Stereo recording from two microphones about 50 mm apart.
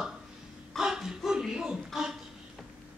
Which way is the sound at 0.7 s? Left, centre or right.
Centre.